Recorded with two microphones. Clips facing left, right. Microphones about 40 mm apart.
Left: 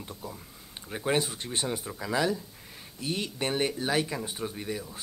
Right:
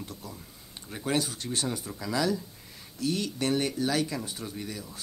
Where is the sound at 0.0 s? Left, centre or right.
Centre.